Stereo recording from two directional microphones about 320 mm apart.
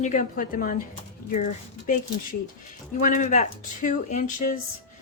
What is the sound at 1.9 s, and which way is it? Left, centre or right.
Speech, left.